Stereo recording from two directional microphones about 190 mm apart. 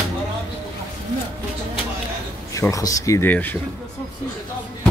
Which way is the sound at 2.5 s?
15° left (ahead or behind).